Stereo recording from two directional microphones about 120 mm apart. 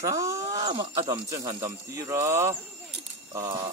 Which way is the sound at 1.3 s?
30° right (ahead or behind).